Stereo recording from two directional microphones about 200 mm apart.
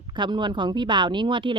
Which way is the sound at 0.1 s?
20° right (ahead or behind).